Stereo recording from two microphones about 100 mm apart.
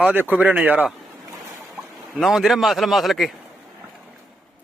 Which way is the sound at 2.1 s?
Centre (ahead or behind).